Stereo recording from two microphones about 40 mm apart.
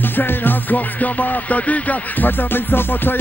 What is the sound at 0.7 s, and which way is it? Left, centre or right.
Music, left.